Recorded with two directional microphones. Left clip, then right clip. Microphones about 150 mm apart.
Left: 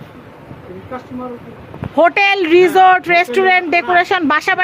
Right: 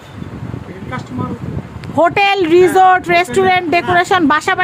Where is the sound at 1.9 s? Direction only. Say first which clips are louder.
Even; 35° right (ahead or behind).